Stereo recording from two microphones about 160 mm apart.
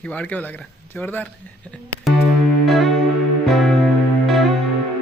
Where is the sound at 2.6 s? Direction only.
Centre (ahead or behind).